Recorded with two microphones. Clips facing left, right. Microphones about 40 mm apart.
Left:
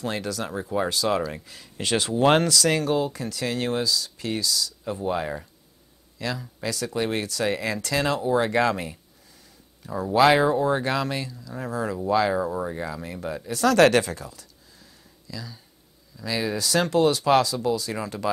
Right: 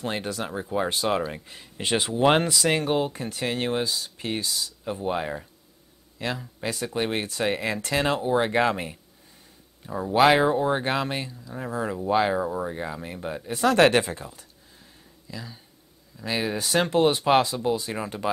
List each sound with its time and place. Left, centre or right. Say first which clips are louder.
0.0 s speech: left 1 dB; right
10.1 s speech: left 1 dB; right
12.4 s speech: left 1 dB; centre
12.6 s speech: left 1 dB; right